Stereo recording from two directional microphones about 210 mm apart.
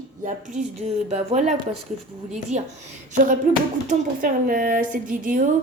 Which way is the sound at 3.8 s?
40° right (ahead or behind).